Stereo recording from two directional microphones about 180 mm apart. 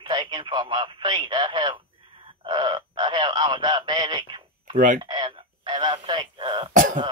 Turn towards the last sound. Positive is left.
turn(degrees=-45)  # may be behind; listen again after turning